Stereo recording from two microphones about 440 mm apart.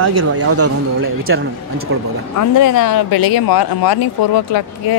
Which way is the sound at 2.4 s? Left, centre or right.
Left.